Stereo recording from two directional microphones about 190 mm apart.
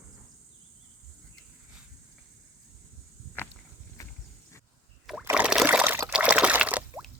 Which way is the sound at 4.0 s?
15° left (ahead or behind).